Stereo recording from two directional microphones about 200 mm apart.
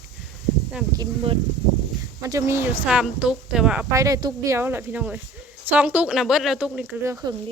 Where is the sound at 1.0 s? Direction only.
25° right (ahead or behind).